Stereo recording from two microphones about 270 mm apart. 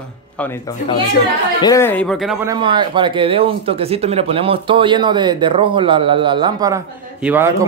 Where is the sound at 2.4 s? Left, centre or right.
Centre.